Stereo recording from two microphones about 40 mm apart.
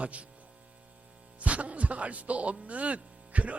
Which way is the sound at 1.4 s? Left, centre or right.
Right.